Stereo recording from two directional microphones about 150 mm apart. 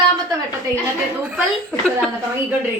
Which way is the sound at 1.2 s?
10° right (ahead or behind).